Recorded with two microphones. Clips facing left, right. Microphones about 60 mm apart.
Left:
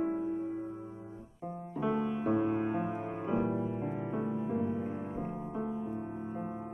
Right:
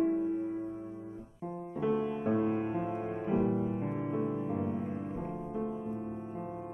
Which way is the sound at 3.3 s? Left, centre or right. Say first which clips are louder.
Right 2 dB; left.